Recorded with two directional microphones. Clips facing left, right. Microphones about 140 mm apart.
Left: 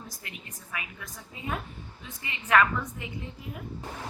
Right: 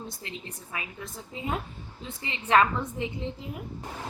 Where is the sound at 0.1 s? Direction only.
25° right (ahead or behind).